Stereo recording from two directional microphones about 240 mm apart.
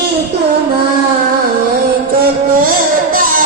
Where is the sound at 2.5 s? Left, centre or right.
Right.